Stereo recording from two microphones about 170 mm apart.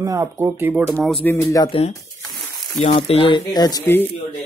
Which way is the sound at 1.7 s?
35° left (ahead or behind).